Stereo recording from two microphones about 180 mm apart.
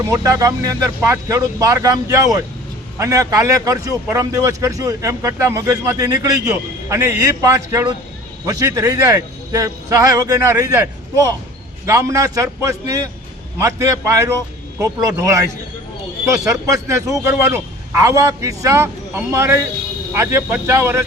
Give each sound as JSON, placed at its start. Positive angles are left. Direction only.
{"t": 0.1, "sound": "a man's voice", "side_deg": -20}
{"t": 11.9, "sound": "a man's voice", "side_deg": -15}